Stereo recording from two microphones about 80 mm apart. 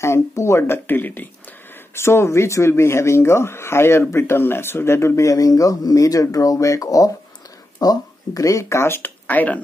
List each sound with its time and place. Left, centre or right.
0.0 s speech: left